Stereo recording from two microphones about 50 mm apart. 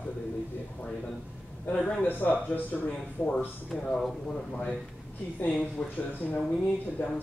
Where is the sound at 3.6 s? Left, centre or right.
Centre.